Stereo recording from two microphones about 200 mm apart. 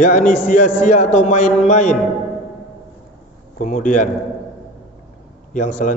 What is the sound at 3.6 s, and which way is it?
Speech, 40° left (ahead or behind).